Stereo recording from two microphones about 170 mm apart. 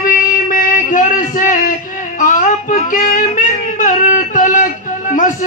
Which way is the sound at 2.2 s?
55° left (ahead or behind).